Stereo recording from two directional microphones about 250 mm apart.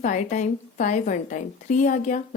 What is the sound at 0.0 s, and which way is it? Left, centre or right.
A woman's voice, left.